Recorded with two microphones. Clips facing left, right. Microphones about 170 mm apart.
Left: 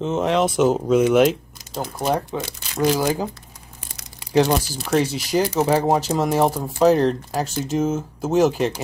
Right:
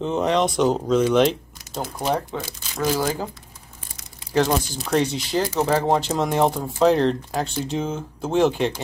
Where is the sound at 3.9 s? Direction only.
75° left (ahead or behind).